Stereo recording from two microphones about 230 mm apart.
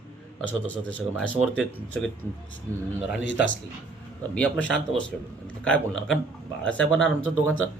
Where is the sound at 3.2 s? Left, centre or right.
Left.